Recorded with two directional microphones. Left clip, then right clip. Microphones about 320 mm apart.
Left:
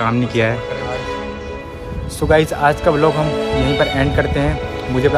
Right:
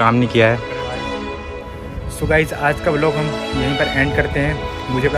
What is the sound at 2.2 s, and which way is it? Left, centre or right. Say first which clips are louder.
Speech: left 3 dB; centre.